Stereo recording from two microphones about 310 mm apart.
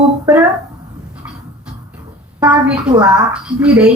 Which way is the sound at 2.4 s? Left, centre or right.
Centre.